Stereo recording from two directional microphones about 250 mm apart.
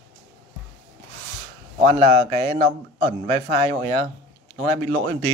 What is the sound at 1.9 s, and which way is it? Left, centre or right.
A man's voice, right.